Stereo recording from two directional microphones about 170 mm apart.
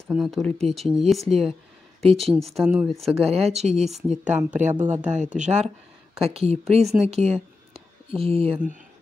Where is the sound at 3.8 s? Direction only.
5° right (ahead or behind).